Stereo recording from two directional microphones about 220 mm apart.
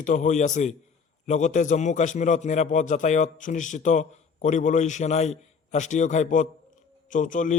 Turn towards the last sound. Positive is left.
turn(degrees=35)  # may be behind; listen again after turning